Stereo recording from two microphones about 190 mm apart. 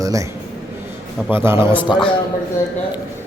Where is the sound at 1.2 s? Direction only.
10° right (ahead or behind).